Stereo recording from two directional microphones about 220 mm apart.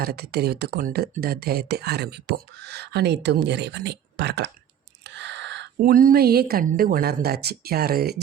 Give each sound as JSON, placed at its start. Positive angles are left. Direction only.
{"t": 0.0, "sound": "speech", "side_deg": -45}